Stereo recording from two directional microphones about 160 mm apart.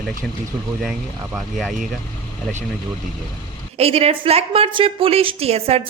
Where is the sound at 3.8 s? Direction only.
40° right (ahead or behind).